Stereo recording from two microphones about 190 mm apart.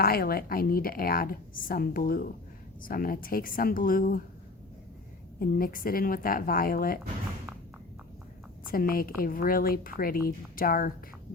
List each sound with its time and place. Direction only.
0.0 s a woman's voice: 50° left (ahead or behind)
5.4 s a woman's voice: 50° left (ahead or behind)
8.6 s a woman's voice: 50° left (ahead or behind)